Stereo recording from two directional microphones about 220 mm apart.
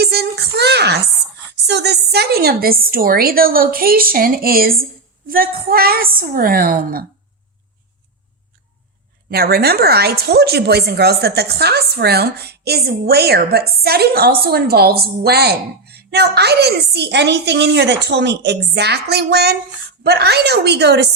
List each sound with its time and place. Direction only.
0.0 s a sound: 45° right (ahead or behind)
1.6 s a woman's voice: 50° right (ahead or behind)
9.3 s a woman's voice: 45° right (ahead or behind)